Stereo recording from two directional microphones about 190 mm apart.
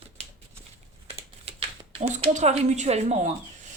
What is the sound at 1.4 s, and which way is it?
Speech, 35° right (ahead or behind).